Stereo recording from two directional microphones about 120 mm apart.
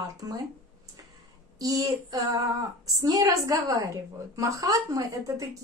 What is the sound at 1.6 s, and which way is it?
A woman's voice, 30° right (ahead or behind).